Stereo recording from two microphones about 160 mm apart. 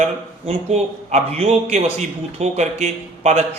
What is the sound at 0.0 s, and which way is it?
A man's voice, 40° right (ahead or behind).